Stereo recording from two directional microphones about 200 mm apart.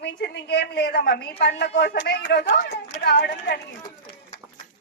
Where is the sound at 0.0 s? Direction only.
55° left (ahead or behind).